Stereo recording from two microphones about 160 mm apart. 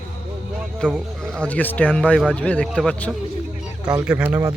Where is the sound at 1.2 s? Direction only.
5° left (ahead or behind).